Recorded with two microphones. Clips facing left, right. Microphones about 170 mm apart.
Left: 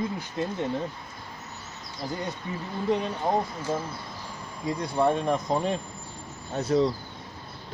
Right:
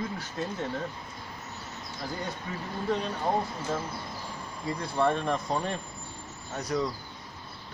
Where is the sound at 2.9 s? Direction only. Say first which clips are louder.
Left 3 dB; 15° left (ahead or behind).